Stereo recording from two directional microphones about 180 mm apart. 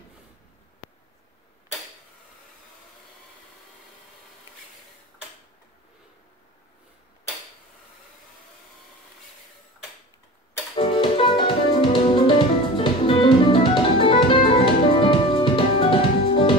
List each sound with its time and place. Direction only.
10.8 s music: 30° left (ahead or behind)